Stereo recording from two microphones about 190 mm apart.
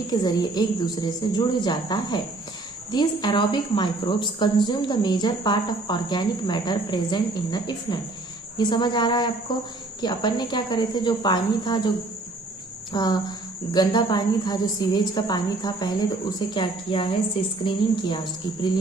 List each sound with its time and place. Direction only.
0.1 s a woman's voice: 20° left (ahead or behind)
12.9 s a woman's voice: 20° left (ahead or behind)